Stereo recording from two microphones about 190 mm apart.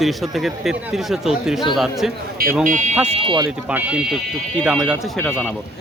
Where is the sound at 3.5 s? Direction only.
5° right (ahead or behind).